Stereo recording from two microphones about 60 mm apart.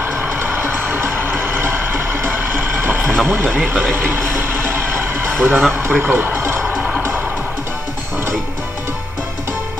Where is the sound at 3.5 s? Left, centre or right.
Right.